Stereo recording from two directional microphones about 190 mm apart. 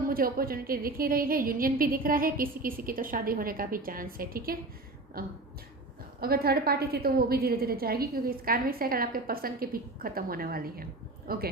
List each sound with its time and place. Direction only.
0.1 s a woman's voice: 50° right (ahead or behind)